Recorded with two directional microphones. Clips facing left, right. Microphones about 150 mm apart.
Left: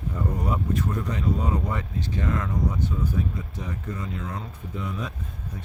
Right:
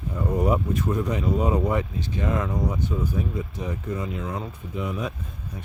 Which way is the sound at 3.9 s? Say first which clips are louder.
Right 3 dB; 15° right (ahead or behind).